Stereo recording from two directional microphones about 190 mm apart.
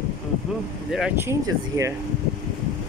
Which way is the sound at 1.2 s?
15° right (ahead or behind).